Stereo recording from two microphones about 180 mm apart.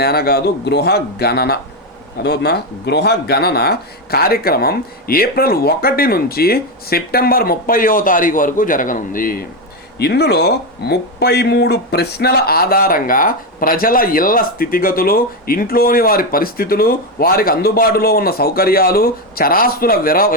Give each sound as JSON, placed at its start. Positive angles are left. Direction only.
{"t": 0.0, "sound": "speech", "side_deg": 60}
{"t": 10.0, "sound": "speech", "side_deg": 65}